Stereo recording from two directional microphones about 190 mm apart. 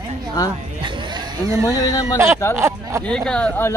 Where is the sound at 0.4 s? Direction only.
20° left (ahead or behind).